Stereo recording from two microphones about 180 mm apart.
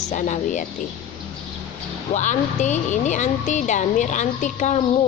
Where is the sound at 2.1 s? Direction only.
40° left (ahead or behind).